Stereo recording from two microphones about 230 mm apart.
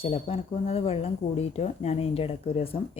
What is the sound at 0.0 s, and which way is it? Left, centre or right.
Speech, left.